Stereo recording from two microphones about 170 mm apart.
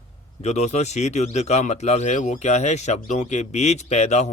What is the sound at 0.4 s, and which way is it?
A man's voice, 40° left (ahead or behind).